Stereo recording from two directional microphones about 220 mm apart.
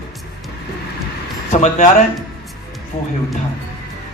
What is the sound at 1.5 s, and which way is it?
Speech, 30° left (ahead or behind).